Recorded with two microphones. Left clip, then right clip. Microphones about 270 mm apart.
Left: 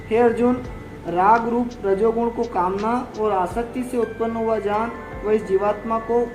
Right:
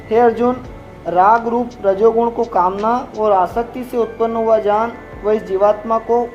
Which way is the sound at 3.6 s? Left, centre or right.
Centre.